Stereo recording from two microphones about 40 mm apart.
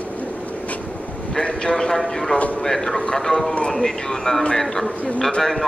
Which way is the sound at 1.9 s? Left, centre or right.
Centre.